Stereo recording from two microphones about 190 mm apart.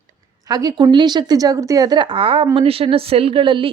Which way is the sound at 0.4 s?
20° right (ahead or behind).